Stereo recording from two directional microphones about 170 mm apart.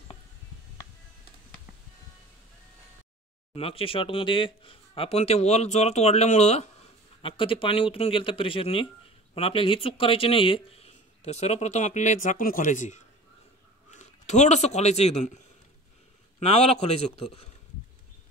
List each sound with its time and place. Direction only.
3.5 s speech: 35° left (ahead or behind)
7.2 s a man's voice: 30° left (ahead or behind)